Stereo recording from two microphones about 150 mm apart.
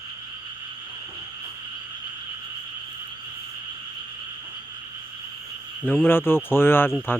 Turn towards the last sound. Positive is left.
turn(degrees=15)  # may be behind; listen again after turning